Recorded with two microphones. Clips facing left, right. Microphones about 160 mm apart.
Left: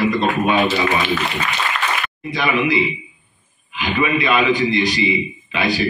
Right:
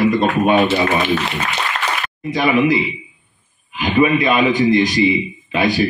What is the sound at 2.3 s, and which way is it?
A man's voice, 45° right (ahead or behind).